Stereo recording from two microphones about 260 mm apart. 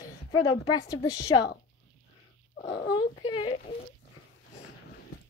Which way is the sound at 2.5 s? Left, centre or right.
Left.